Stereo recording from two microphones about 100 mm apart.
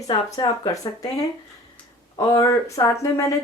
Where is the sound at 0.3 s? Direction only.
35° left (ahead or behind).